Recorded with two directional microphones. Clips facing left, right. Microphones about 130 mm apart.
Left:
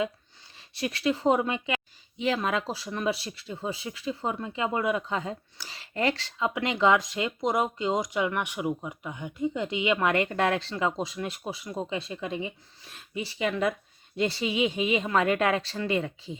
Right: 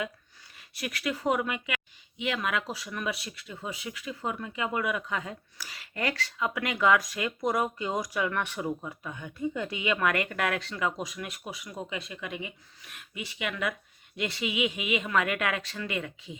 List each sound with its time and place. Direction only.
0.5 s a woman's voice: 25° left (ahead or behind)